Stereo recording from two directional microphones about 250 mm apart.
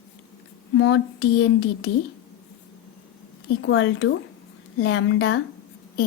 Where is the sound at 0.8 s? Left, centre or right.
Left.